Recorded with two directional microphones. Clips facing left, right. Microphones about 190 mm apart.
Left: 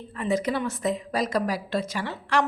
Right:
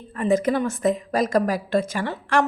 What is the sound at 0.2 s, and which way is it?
A woman's voice, 50° right (ahead or behind).